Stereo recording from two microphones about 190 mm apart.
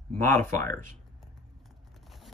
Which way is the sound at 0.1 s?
10° left (ahead or behind).